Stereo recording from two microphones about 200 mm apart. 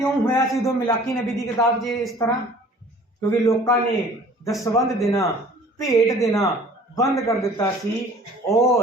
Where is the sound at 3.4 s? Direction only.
15° left (ahead or behind).